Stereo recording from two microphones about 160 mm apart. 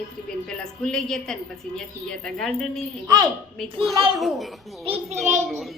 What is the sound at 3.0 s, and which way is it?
Speech, 25° right (ahead or behind).